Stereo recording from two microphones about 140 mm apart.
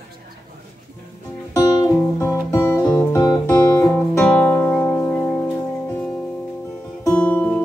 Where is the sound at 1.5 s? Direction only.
25° left (ahead or behind).